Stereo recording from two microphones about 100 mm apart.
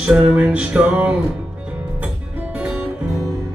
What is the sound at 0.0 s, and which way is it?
Music, 10° right (ahead or behind).